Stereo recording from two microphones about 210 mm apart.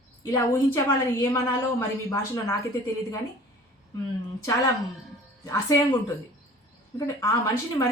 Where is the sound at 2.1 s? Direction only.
15° left (ahead or behind).